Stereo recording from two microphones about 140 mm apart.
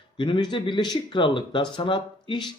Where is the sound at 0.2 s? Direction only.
35° left (ahead or behind).